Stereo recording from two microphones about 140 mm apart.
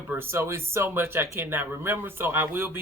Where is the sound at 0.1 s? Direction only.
15° right (ahead or behind).